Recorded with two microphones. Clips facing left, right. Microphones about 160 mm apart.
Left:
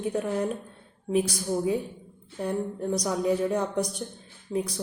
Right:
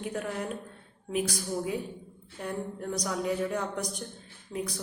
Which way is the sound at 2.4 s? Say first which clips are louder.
Left 6 dB; 25° left (ahead or behind).